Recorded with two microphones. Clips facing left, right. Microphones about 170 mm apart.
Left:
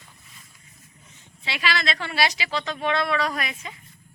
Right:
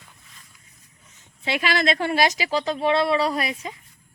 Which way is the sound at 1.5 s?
50° right (ahead or behind).